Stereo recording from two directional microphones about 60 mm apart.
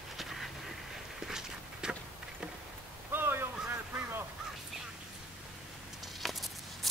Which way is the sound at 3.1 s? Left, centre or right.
Right.